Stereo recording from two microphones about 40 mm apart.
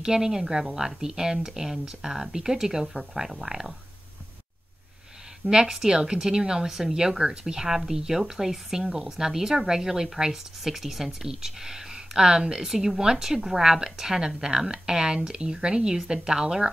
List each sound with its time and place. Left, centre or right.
0.0 s a woman's voice: centre
5.5 s a woman's voice: centre